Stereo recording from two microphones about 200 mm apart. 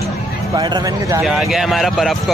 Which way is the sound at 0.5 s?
20° right (ahead or behind).